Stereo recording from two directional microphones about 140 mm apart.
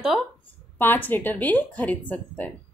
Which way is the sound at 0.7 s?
15° left (ahead or behind).